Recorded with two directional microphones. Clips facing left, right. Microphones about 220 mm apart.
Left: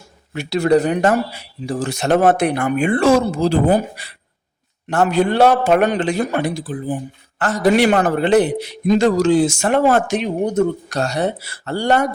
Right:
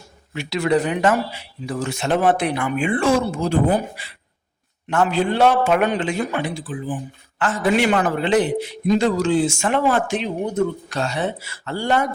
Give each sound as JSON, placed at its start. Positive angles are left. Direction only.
{"t": 0.6, "sound": "speech", "side_deg": 40}
{"t": 4.9, "sound": "a man's voice", "side_deg": 40}